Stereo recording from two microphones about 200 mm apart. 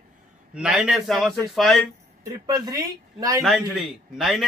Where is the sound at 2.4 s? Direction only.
20° right (ahead or behind).